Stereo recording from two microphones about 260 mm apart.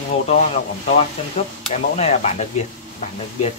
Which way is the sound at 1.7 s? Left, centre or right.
Left.